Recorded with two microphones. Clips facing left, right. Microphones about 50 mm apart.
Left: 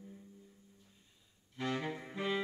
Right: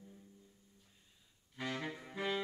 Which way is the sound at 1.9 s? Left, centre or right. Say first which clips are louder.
Left 3 dB; centre.